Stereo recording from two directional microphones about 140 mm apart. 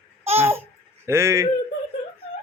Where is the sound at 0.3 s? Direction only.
15° right (ahead or behind).